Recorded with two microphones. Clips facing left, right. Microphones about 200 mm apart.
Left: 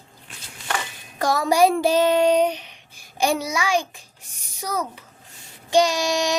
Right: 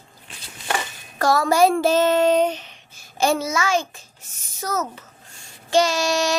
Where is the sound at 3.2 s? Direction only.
15° left (ahead or behind).